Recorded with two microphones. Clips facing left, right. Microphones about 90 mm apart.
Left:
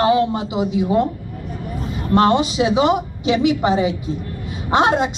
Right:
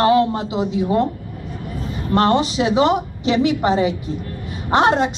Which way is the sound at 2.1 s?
15° left (ahead or behind).